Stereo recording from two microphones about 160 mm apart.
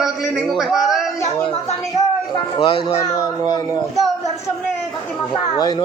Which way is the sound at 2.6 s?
30° left (ahead or behind).